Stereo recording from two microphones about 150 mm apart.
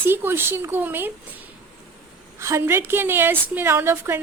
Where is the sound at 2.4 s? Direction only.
15° right (ahead or behind).